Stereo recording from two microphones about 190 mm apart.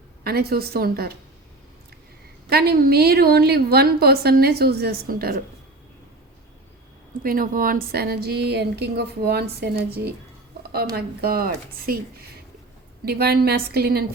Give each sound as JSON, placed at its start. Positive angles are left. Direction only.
{"t": 0.3, "sound": "a woman's voice", "side_deg": -55}
{"t": 2.5, "sound": "a woman's voice", "side_deg": -55}
{"t": 7.2, "sound": "a woman's voice", "side_deg": -50}
{"t": 10.6, "sound": "a sound", "side_deg": -55}
{"t": 10.9, "sound": "a woman's voice", "side_deg": -55}